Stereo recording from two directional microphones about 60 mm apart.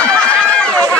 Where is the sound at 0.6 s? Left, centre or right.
Centre.